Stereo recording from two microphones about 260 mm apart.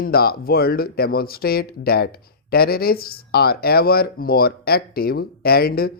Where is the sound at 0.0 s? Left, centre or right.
Left.